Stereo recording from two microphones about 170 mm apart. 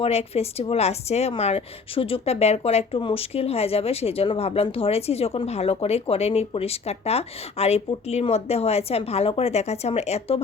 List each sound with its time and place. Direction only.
0.0 s speech: 35° left (ahead or behind)